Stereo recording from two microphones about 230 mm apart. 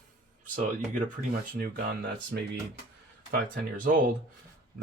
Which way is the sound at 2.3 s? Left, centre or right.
Right.